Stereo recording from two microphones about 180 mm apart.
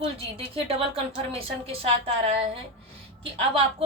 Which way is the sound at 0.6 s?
30° right (ahead or behind).